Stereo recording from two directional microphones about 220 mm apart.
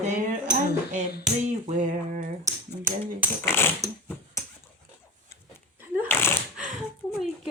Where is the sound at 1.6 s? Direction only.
35° right (ahead or behind).